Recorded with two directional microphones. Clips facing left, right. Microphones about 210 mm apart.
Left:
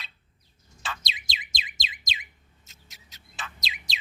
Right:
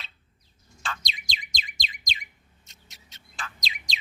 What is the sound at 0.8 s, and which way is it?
Bird, 5° left (ahead or behind).